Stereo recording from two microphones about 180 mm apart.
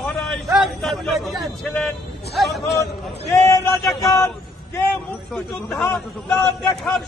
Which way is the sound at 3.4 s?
20° left (ahead or behind).